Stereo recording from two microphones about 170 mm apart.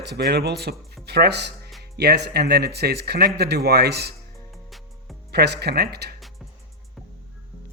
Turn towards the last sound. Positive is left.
turn(degrees=0)  # may be behind; listen again after turning